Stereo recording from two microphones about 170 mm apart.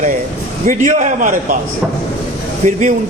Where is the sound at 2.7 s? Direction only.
50° right (ahead or behind).